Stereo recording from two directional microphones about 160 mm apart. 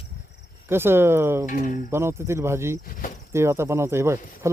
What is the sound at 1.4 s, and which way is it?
Speech, 55° left (ahead or behind).